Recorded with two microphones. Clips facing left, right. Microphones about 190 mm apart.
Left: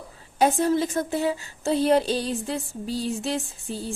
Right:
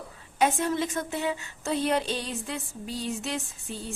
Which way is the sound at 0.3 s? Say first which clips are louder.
Left 5 dB; 35° left (ahead or behind).